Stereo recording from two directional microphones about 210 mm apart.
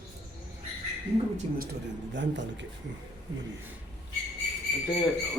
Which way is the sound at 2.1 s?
60° right (ahead or behind).